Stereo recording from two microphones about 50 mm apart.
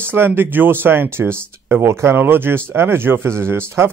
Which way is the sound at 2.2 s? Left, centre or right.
Right.